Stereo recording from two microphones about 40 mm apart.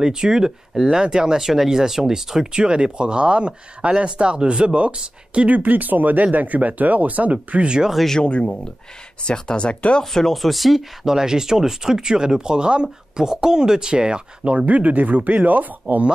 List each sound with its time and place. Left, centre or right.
0.0 s speech: centre
5.5 s speech: right
7.6 s speech: right
8.2 s speech: left
10.1 s speech: centre
11.1 s speech: centre; by 16.0 s right